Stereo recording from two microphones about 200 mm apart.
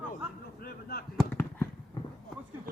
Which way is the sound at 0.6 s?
50° left (ahead or behind).